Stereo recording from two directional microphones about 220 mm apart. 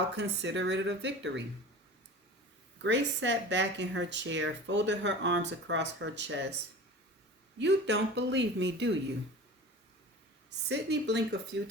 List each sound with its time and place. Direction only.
0.2 s a woman's voice: 55° right (ahead or behind)
2.8 s a woman's voice: 55° right (ahead or behind)
7.6 s a woman's voice: 50° right (ahead or behind)
10.7 s a woman's voice: 50° right (ahead or behind)